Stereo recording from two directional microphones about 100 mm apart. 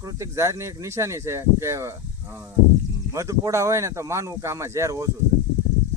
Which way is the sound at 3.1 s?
30° right (ahead or behind).